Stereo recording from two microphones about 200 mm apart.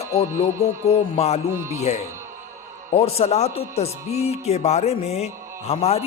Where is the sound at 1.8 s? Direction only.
35° left (ahead or behind).